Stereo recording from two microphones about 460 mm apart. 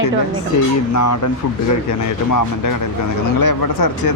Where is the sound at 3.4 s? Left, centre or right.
Left.